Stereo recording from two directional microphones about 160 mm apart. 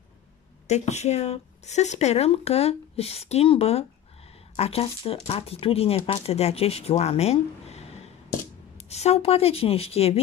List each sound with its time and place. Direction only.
0.7 s speech: 45° left (ahead or behind)
8.8 s speech: 40° left (ahead or behind)